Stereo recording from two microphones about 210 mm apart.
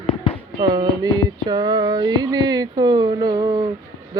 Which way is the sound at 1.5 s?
20° right (ahead or behind).